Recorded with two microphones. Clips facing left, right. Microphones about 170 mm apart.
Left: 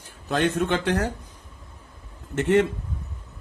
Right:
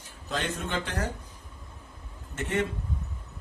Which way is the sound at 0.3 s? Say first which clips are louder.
Left 9 dB; 60° left (ahead or behind).